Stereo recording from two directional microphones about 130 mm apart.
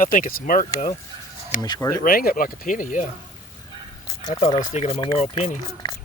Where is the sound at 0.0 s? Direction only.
90° left.